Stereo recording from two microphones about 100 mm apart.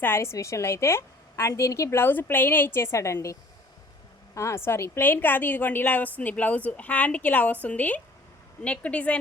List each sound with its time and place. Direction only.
0.0 s a woman's voice: 25° left (ahead or behind)
4.4 s a woman's voice: 30° left (ahead or behind); by 9.1 s 15° left (ahead or behind)